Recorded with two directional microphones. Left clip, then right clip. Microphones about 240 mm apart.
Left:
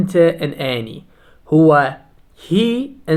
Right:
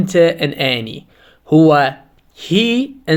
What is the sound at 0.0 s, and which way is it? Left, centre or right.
Speech, right.